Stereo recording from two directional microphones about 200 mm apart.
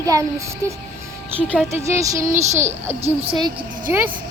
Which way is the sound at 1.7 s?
15° right (ahead or behind).